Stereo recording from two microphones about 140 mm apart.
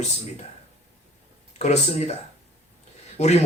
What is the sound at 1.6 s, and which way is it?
Speech, 50° left (ahead or behind).